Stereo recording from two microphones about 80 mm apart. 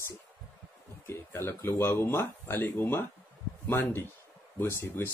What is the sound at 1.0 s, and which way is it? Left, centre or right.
Speech, left.